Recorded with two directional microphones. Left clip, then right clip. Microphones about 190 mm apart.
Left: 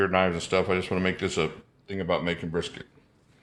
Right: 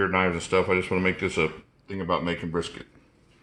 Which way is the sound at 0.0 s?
25° left (ahead or behind).